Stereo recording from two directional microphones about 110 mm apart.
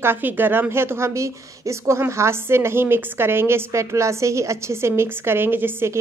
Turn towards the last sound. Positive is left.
turn(degrees=-20)  # may be behind; listen again after turning